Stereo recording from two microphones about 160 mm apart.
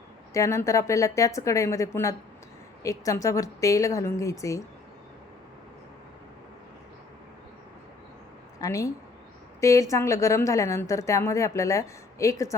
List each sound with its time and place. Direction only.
0.3 s a woman's voice: 20° left (ahead or behind)
8.5 s a sound: 20° left (ahead or behind)
9.6 s a woman's voice: 20° left (ahead or behind)